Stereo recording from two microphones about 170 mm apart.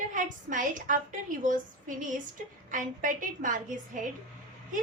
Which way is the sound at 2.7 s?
50° right (ahead or behind).